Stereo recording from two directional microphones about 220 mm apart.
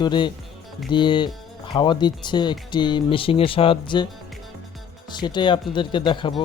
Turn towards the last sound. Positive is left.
turn(degrees=20)  # may be behind; listen again after turning